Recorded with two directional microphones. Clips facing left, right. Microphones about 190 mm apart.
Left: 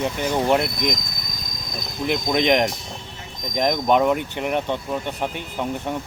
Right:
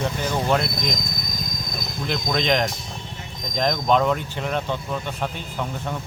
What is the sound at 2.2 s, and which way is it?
Speech, 15° left (ahead or behind).